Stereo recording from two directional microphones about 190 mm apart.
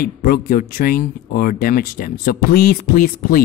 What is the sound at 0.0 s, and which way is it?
Speech, 50° left (ahead or behind).